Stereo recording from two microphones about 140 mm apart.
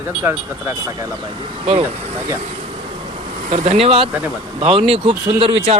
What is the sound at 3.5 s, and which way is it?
Speech, 45° right (ahead or behind).